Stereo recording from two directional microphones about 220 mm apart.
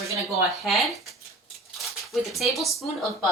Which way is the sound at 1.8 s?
Centre (ahead or behind).